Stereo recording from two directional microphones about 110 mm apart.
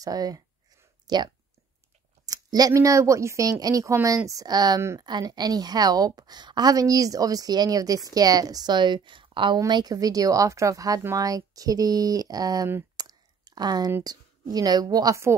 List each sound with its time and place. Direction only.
0.0 s a woman's voice: 35° right (ahead or behind)
12.9 s a sound: 35° right (ahead or behind)
14.0 s a woman's voice: 35° right (ahead or behind)